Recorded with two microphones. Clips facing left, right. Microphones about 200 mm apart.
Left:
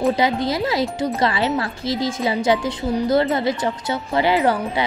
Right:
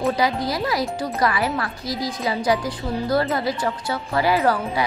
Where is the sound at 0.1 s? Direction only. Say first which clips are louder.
Left 2 dB; 25° left (ahead or behind).